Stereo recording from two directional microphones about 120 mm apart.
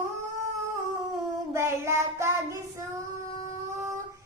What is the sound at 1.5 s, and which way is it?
Child singing, 25° right (ahead or behind).